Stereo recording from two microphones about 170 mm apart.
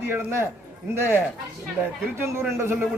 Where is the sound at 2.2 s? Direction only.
15° right (ahead or behind).